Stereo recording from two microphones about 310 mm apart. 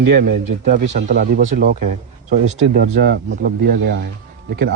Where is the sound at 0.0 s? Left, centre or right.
Right.